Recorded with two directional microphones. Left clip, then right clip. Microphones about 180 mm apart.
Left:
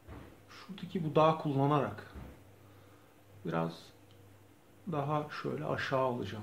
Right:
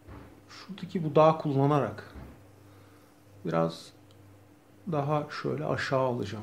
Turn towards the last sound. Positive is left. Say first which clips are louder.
# right 4 dB
turn(degrees=-25)  # may be behind; listen again after turning